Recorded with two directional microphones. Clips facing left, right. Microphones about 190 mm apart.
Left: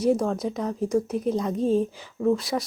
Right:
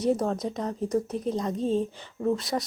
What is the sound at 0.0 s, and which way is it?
Speech, centre (ahead or behind).